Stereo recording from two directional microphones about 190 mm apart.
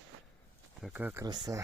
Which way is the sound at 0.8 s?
5° right (ahead or behind).